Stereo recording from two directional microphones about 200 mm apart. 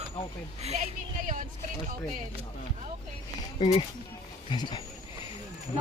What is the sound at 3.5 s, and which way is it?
Speech, 30° left (ahead or behind).